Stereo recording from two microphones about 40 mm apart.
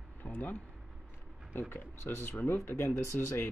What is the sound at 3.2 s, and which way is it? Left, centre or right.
Speech, left.